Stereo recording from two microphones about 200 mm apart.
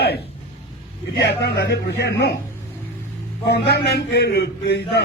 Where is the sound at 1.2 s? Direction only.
55° left (ahead or behind).